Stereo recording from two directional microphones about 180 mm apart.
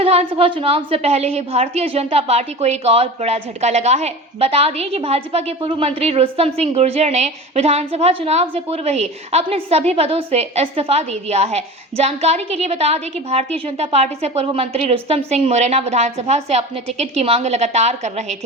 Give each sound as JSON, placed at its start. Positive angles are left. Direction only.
{"t": 0.0, "sound": "a woman's voice", "side_deg": -35}